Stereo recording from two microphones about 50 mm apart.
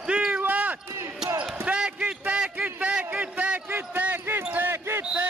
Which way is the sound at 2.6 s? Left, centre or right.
Right.